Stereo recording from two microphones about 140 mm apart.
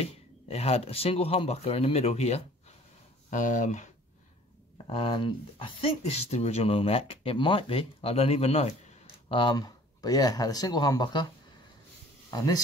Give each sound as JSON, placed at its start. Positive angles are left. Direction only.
{"t": 0.0, "sound": "speech", "side_deg": 45}
{"t": 3.3, "sound": "speech", "side_deg": 65}
{"t": 4.8, "sound": "speech", "side_deg": 40}
{"t": 9.3, "sound": "speech", "side_deg": 35}
{"t": 12.3, "sound": "speech", "side_deg": 25}